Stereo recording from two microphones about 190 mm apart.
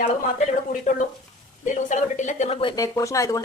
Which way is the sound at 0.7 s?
45° left (ahead or behind).